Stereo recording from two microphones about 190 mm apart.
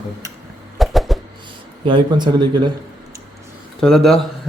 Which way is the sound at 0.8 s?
Centre (ahead or behind).